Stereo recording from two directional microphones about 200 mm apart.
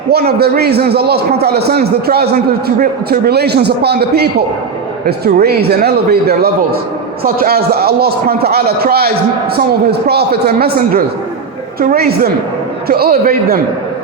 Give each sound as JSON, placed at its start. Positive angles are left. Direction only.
{"t": 0.1, "sound": "a man's voice", "side_deg": -50}